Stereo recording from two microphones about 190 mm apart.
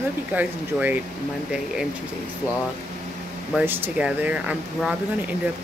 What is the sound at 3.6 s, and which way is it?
Speech, 10° right (ahead or behind).